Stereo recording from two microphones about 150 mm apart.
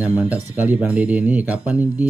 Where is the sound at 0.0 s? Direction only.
10° right (ahead or behind).